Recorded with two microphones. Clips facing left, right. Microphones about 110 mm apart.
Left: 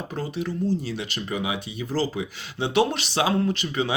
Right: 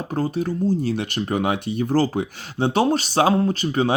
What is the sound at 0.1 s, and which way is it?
Speech, 45° right (ahead or behind).